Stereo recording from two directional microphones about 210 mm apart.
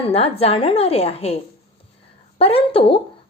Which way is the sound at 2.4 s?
25° left (ahead or behind).